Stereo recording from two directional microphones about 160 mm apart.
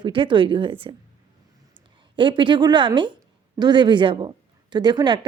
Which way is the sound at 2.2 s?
30° right (ahead or behind).